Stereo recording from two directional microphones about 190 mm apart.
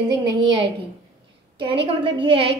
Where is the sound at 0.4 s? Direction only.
25° right (ahead or behind).